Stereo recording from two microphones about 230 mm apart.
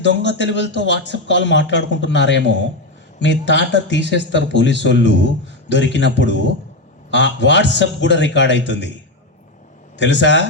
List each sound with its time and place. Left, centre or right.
0.0 s speech: left
10.0 s speech: left